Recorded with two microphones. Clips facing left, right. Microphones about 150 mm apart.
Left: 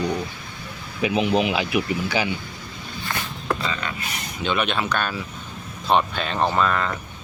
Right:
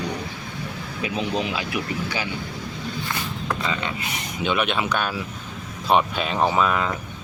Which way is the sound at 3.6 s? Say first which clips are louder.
Right 1 dB; 20° right (ahead or behind).